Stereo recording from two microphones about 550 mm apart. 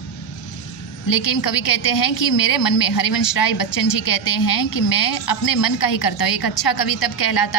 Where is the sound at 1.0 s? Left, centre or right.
Left.